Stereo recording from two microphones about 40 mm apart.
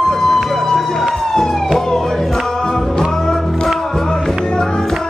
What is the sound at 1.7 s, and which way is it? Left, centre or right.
Emergency vehicle, centre.